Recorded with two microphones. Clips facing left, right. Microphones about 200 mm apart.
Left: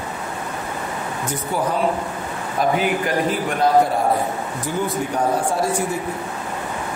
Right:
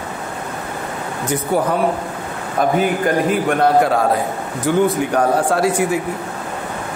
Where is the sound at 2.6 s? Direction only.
50° right (ahead or behind).